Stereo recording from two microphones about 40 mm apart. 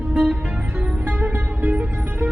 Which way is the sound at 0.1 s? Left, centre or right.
Centre.